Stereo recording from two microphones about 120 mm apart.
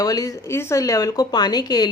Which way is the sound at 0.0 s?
30° left (ahead or behind).